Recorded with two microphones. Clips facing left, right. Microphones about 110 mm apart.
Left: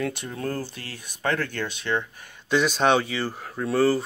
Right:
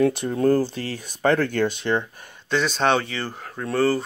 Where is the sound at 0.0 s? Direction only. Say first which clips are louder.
Right 10 dB; 35° right (ahead or behind).